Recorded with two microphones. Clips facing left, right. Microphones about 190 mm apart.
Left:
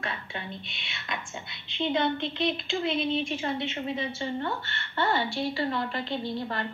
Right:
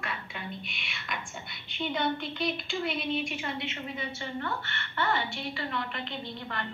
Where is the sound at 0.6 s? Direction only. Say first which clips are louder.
Left 2 dB; 25° left (ahead or behind).